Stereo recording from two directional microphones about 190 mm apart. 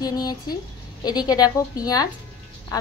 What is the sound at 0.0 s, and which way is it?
A woman's voice, 20° left (ahead or behind).